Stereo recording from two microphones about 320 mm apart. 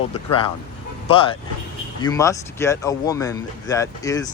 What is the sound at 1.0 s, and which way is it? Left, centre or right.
Speech, centre.